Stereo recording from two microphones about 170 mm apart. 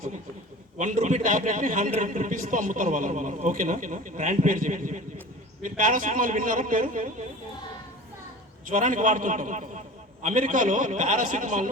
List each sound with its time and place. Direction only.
0.8 s a man's voice: 50° right (ahead or behind)
8.7 s a man's voice: 50° right (ahead or behind)